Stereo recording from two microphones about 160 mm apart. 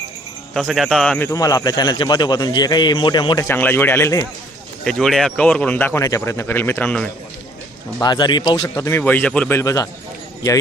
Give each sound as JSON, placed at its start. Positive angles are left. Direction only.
{"t": 0.5, "sound": "speech", "side_deg": 0}
{"t": 1.3, "sound": "a man's voice", "side_deg": 20}
{"t": 3.4, "sound": "speech", "side_deg": 10}
{"t": 4.8, "sound": "speech", "side_deg": 5}
{"t": 8.0, "sound": "a man's voice", "side_deg": 25}
{"t": 9.6, "sound": "a man's voice", "side_deg": 20}